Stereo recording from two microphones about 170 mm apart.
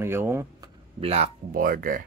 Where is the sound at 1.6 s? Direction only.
55° right (ahead or behind).